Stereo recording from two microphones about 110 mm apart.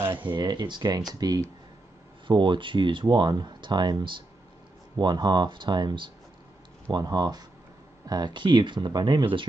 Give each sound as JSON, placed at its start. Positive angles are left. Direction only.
{"t": 0.1, "sound": "speech", "side_deg": -45}